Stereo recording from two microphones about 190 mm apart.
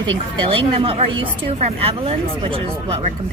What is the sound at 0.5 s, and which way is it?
A woman's voice, 30° right (ahead or behind).